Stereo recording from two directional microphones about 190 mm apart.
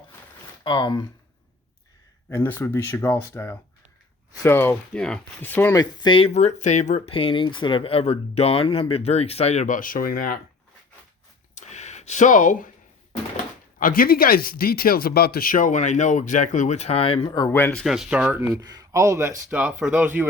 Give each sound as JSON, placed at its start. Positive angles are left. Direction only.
{"t": 0.6, "sound": "speech", "side_deg": 25}
{"t": 2.3, "sound": "speech", "side_deg": 15}
{"t": 11.5, "sound": "a sound", "side_deg": 40}
{"t": 13.7, "sound": "speech", "side_deg": 50}
{"t": 17.8, "sound": "speech", "side_deg": 0}